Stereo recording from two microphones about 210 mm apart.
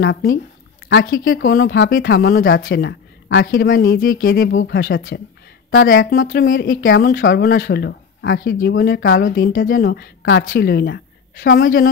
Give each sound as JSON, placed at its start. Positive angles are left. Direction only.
{"t": 0.0, "sound": "speech", "side_deg": 50}
{"t": 4.5, "sound": "speech", "side_deg": 55}